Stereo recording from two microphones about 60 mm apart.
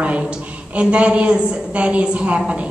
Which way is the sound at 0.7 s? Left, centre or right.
Centre.